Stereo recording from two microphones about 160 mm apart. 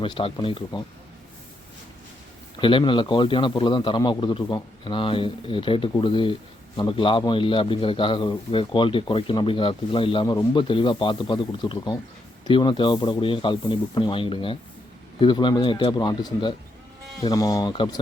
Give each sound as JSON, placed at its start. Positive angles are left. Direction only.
{"t": 0.0, "sound": "a man's voice", "side_deg": 35}
{"t": 2.6, "sound": "a man's voice", "side_deg": 30}